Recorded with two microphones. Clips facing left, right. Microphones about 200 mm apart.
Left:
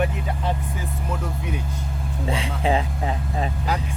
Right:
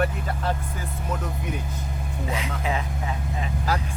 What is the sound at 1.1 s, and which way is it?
Speech, centre (ahead or behind).